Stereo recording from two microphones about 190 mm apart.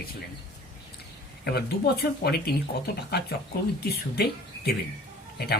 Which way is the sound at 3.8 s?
55° left (ahead or behind).